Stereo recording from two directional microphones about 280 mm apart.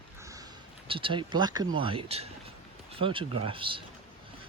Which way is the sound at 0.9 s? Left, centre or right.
Centre.